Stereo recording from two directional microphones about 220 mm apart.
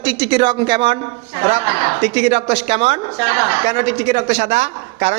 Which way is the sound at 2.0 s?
30° right (ahead or behind).